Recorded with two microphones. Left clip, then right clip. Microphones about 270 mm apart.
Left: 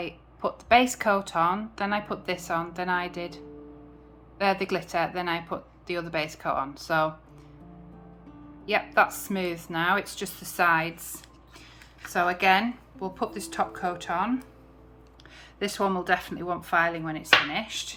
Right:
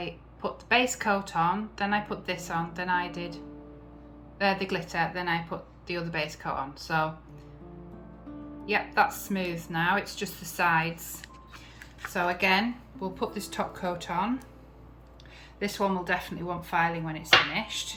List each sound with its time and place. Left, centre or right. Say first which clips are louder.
0.0 s a woman's voice: left 3 dB; centre
8.6 s a woman's voice: left 2 dB; centre
12.1 s speech: left 3 dB; centre
15.5 s speech: left 2 dB; centre